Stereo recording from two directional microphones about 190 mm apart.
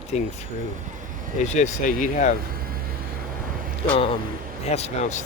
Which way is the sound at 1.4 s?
40° left (ahead or behind).